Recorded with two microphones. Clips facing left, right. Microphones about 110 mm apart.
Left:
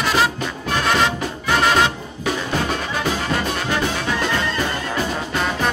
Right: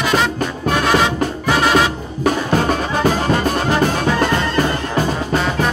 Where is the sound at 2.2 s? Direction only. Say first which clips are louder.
Right 6 dB; 45° right (ahead or behind).